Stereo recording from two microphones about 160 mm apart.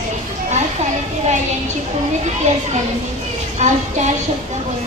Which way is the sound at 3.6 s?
45° right (ahead or behind).